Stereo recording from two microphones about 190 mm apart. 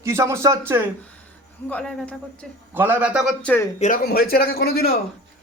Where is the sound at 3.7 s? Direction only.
35° left (ahead or behind).